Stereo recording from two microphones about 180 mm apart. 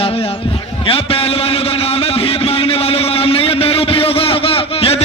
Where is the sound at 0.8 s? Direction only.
30° left (ahead or behind).